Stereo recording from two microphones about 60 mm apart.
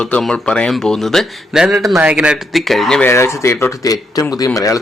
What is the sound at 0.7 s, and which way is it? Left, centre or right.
Speech, centre.